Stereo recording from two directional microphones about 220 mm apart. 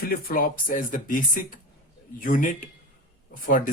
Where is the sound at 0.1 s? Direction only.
40° left (ahead or behind).